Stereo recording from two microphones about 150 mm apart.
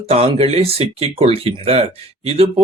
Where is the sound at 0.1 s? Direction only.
40° right (ahead or behind).